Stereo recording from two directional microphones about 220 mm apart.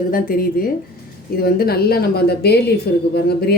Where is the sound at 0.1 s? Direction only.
40° left (ahead or behind).